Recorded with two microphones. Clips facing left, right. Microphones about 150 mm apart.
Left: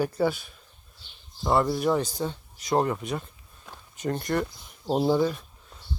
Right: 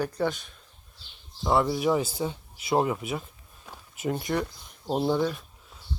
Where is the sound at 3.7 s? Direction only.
5° right (ahead or behind).